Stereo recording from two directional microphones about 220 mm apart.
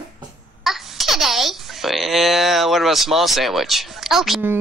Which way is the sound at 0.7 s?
Centre (ahead or behind).